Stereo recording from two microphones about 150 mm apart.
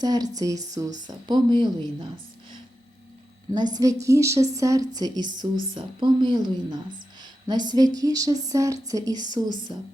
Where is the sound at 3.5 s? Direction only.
25° right (ahead or behind).